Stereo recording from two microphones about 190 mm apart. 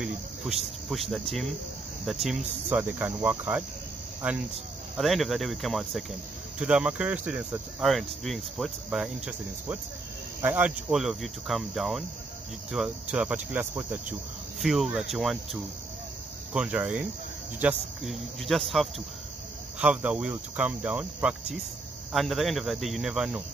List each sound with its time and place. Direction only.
0.0 s speech: centre (ahead or behind)